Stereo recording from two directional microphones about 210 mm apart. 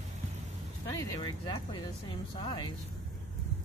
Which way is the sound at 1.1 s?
20° left (ahead or behind).